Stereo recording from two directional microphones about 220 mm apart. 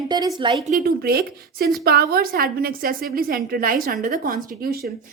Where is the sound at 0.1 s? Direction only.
20° right (ahead or behind).